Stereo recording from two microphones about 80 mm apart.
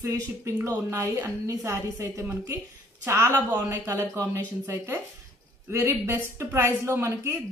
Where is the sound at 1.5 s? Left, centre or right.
Right.